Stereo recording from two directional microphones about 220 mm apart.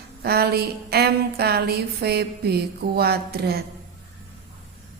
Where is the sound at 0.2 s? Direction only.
45° right (ahead or behind).